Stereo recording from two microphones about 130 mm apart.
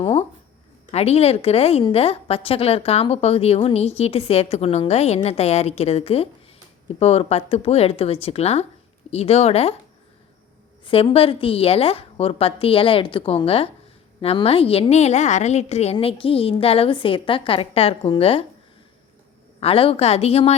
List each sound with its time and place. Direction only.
0.0 s a woman's voice: 45° left (ahead or behind)
10.8 s a woman's voice: 45° left (ahead or behind)
19.5 s a woman's voice: 45° left (ahead or behind)